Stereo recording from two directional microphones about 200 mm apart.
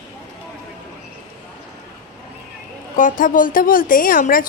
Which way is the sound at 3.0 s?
40° left (ahead or behind).